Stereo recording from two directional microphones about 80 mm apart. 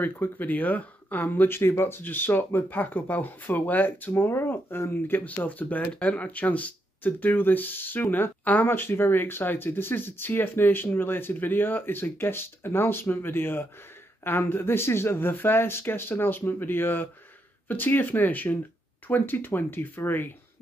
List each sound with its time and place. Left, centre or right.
0.0 s speech: left